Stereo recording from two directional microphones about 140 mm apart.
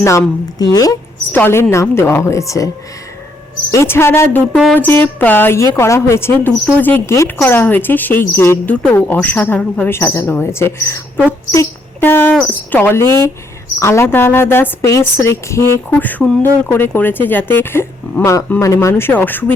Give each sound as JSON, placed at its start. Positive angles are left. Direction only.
{"t": 0.0, "sound": "speech", "side_deg": 20}
{"t": 1.3, "sound": "speech", "side_deg": 15}
{"t": 3.7, "sound": "speech", "side_deg": 20}